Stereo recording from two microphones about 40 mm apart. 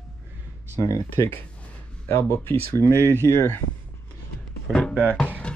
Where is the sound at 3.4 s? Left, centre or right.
Left.